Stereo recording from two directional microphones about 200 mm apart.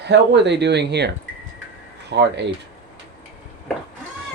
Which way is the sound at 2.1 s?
60° right (ahead or behind).